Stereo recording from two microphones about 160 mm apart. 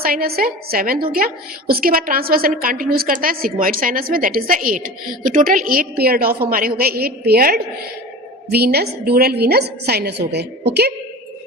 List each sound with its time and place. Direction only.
0.0 s a woman's voice: 70° right (ahead or behind)
8.4 s a woman's voice: 80° right